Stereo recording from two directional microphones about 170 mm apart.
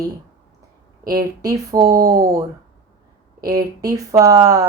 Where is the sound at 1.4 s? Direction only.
20° right (ahead or behind).